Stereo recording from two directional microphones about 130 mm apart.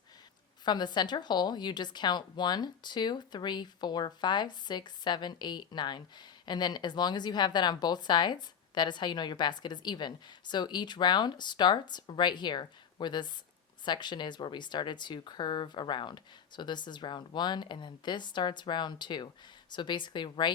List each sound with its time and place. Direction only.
0.6 s speech: 35° left (ahead or behind)